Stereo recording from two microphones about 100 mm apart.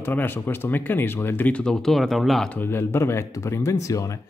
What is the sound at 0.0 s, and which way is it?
Speech, 20° left (ahead or behind).